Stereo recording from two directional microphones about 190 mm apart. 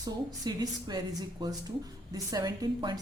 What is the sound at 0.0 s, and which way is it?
A woman's voice, 20° right (ahead or behind).